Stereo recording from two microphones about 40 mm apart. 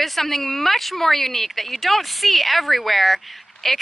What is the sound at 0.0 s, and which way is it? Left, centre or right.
Speech, centre.